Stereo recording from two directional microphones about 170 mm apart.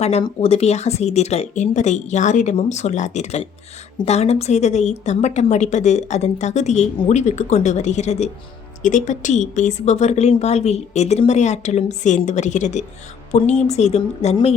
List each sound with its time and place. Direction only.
0.0 s a woman's voice: 35° left (ahead or behind)